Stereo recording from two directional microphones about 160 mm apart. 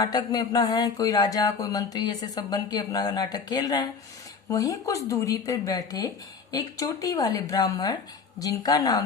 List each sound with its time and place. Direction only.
0.0 s speech: 25° left (ahead or behind)